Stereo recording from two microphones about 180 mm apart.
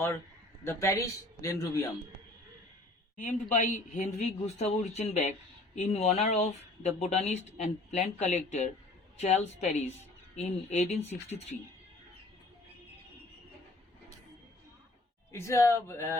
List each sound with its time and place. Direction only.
0.6 s a man's voice: 15° left (ahead or behind)
3.5 s speech: 45° left (ahead or behind)
15.3 s a man's voice: 15° left (ahead or behind)